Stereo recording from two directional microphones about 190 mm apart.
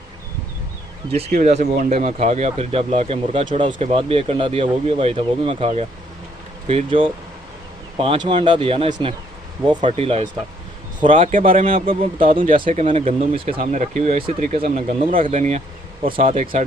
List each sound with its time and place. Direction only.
1.1 s speech: 35° right (ahead or behind)
11.2 s speech: 45° right (ahead or behind)
11.4 s speech: 30° right (ahead or behind)
13.6 s speech: 40° right (ahead or behind)